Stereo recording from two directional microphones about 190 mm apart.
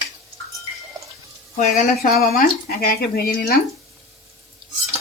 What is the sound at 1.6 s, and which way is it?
Speech, 50° left (ahead or behind).